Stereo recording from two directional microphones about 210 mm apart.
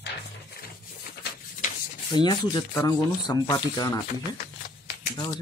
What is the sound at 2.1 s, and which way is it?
Speech, 20° left (ahead or behind).